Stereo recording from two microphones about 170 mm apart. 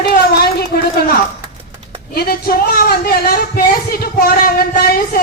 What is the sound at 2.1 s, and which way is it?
Speech, 65° left (ahead or behind).